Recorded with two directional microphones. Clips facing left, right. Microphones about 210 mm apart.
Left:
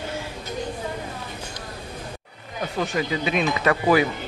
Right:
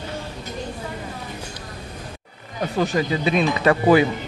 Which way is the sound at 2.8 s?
35° right (ahead or behind).